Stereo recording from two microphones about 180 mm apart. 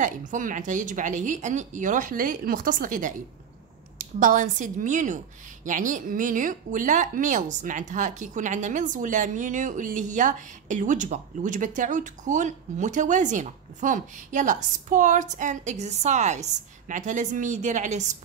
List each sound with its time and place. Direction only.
0.0 s speech: 45° right (ahead or behind)